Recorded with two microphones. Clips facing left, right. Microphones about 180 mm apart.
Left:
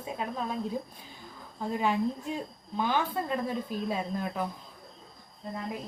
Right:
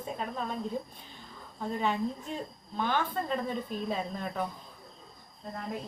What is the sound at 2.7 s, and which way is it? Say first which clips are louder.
Speech: left 2 dB; 10° left (ahead or behind).